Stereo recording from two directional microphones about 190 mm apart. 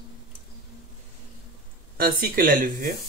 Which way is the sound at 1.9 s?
50° right (ahead or behind).